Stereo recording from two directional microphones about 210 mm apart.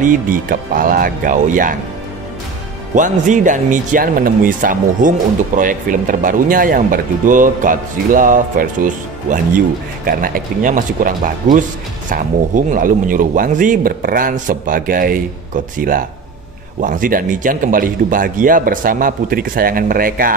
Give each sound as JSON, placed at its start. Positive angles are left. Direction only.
{"t": 0.0, "sound": "speech", "side_deg": -40}
{"t": 2.9, "sound": "speech", "side_deg": -35}